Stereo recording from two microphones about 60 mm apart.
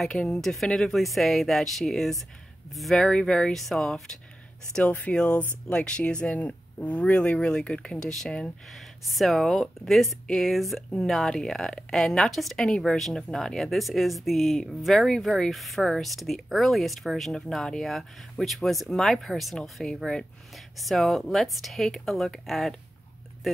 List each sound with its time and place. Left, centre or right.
0.2 s speech: centre
3.1 s speech: centre
4.8 s speech: left; by 23.6 s centre